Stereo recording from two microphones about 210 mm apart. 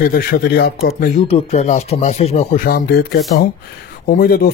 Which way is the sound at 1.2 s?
30° left (ahead or behind).